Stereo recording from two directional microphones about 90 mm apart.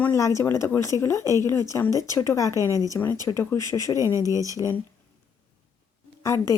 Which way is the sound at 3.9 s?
35° right (ahead or behind).